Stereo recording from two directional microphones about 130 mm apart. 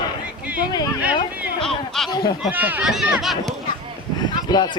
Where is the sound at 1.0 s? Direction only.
10° right (ahead or behind).